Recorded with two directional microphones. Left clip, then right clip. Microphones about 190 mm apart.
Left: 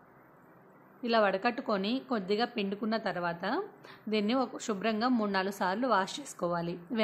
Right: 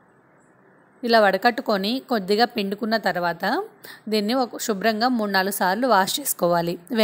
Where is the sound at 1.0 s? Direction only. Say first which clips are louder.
Right 10 dB; 30° right (ahead or behind).